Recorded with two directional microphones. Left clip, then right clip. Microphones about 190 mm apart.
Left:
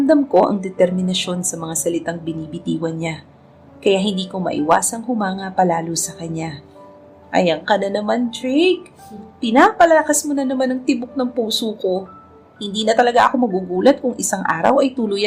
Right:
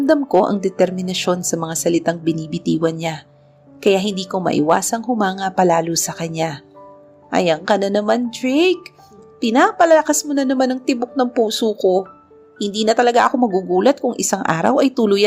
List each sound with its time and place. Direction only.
0.0 s a woman's voice: 30° right (ahead or behind)